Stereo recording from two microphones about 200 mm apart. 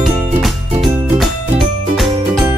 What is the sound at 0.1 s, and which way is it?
Music, 35° right (ahead or behind).